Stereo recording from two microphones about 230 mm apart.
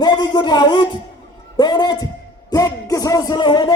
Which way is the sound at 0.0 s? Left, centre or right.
Centre.